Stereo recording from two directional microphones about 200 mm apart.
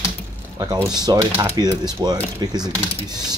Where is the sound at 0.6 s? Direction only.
15° right (ahead or behind).